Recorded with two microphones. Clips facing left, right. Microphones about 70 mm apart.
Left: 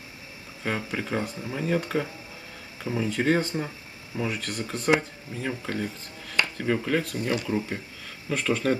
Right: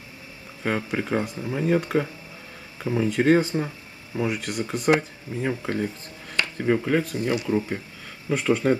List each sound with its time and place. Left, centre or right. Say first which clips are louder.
0.7 s speech: right 4 dB; centre